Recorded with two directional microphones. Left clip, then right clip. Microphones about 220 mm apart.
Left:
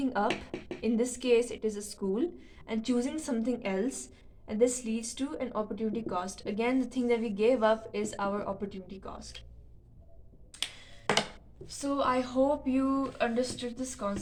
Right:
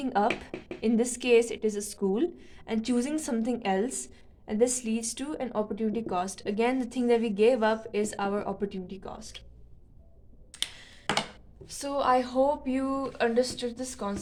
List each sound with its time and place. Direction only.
0.0 s a woman's voice: 40° right (ahead or behind)
11.8 s a woman's voice: 50° right (ahead or behind)